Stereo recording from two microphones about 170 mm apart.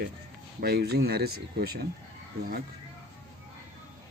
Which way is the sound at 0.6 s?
70° right (ahead or behind).